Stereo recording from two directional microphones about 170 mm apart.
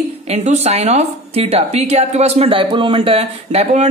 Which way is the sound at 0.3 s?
40° right (ahead or behind).